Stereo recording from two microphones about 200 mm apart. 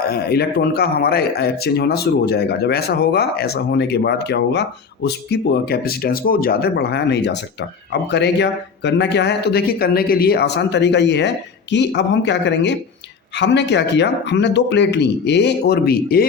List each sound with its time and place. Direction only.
0.0 s speech: 50° left (ahead or behind)